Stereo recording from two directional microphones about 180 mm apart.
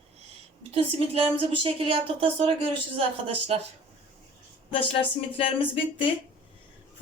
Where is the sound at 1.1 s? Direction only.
30° right (ahead or behind).